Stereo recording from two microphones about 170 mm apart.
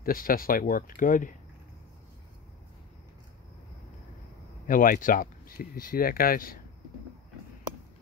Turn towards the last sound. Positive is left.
turn(degrees=55)  # may be behind; listen again after turning